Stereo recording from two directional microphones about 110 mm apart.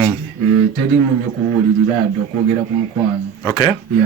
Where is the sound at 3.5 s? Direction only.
45° left (ahead or behind).